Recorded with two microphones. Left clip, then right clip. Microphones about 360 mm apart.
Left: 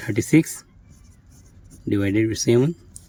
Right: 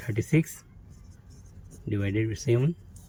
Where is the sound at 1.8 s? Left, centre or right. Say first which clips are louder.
Left 9 dB; centre.